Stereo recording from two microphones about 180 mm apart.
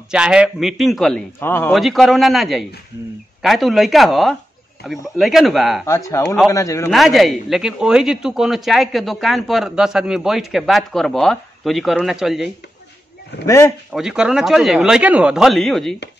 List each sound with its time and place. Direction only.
0.1 s a man's voice: 5° right (ahead or behind)
1.4 s speech: 10° left (ahead or behind)
1.7 s a man's voice: centre (ahead or behind)
5.9 s speech: 15° left (ahead or behind)
6.9 s a man's voice: centre (ahead or behind)
13.5 s speech: 15° left (ahead or behind)
13.9 s a man's voice: 5° right (ahead or behind)